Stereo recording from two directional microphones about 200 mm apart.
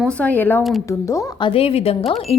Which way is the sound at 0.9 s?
15° left (ahead or behind).